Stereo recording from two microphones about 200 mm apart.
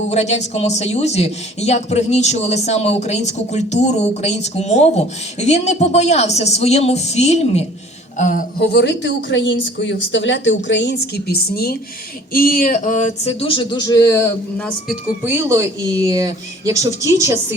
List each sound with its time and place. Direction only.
0.1 s a woman's voice: 35° left (ahead or behind); by 14.3 s 15° left (ahead or behind)
15.2 s speech: 15° right (ahead or behind)